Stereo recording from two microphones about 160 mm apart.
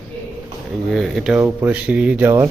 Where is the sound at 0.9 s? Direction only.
Centre (ahead or behind).